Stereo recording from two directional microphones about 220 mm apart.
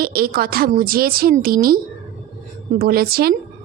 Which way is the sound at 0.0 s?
45° right (ahead or behind).